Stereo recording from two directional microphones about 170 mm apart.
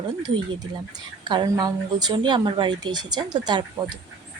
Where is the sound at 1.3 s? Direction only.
25° right (ahead or behind).